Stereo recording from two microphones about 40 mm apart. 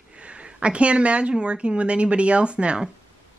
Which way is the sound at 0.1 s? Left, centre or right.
Right.